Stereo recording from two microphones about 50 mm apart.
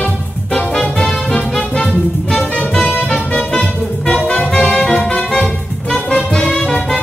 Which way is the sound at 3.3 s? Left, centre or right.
Centre.